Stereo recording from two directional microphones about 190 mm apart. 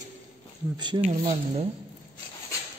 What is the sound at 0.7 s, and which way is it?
Speech, 25° right (ahead or behind).